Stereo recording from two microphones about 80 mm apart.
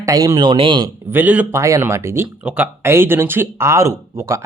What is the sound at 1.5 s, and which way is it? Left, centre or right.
Speech, right.